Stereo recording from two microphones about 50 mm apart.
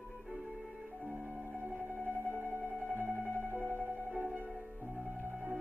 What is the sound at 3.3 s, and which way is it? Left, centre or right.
Music, right.